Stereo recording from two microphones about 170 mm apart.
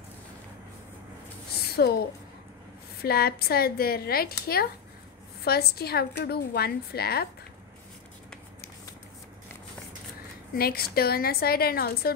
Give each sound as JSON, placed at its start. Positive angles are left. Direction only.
{"t": 1.8, "sound": "a woman's voice", "side_deg": 70}
{"t": 3.0, "sound": "a woman's voice", "side_deg": 65}
{"t": 10.5, "sound": "speech", "side_deg": 60}